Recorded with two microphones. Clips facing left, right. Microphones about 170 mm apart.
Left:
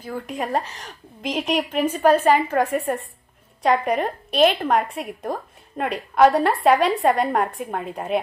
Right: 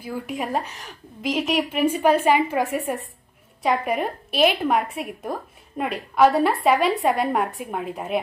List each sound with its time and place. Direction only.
0.0 s a woman's voice: 5° right (ahead or behind)